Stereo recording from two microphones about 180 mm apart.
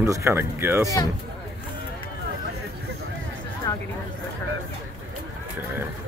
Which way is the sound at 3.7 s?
15° left (ahead or behind).